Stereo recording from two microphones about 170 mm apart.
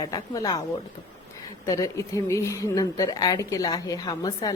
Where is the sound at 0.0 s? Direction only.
25° left (ahead or behind).